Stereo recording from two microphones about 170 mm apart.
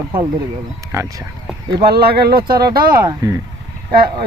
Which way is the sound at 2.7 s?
60° right (ahead or behind).